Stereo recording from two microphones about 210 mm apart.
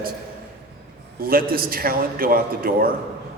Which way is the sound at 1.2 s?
45° right (ahead or behind).